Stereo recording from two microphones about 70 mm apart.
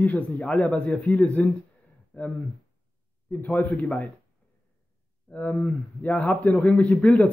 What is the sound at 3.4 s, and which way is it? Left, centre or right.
Speech, left.